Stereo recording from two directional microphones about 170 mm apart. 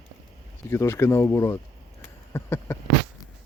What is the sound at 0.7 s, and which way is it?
Speech, 15° left (ahead or behind).